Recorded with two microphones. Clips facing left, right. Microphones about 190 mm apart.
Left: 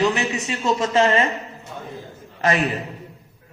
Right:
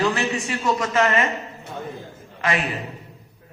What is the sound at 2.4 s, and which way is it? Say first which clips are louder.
Speech: left 4 dB; 40° left (ahead or behind).